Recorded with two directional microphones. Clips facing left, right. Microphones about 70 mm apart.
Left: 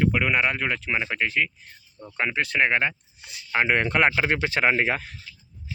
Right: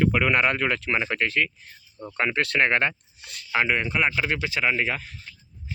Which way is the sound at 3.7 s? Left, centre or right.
Left.